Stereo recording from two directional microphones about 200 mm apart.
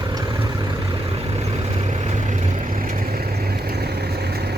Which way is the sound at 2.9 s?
50° right (ahead or behind).